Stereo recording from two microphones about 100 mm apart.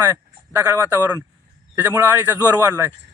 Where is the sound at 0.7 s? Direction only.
20° right (ahead or behind).